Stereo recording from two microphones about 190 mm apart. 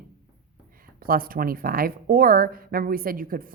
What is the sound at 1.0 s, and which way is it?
Speech, 50° right (ahead or behind).